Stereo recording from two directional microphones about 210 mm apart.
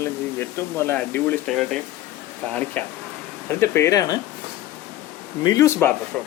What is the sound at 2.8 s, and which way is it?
Speech, 5° left (ahead or behind).